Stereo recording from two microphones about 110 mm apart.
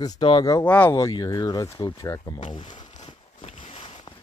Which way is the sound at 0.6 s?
10° left (ahead or behind).